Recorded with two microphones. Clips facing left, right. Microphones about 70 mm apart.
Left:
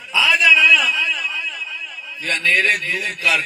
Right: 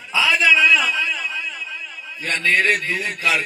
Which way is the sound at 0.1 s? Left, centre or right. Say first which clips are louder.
Left 1 dB; right.